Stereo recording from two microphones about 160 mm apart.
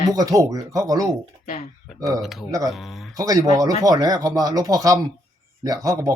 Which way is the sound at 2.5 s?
20° right (ahead or behind).